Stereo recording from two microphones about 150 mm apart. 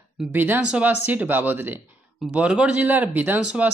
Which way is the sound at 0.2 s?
10° right (ahead or behind).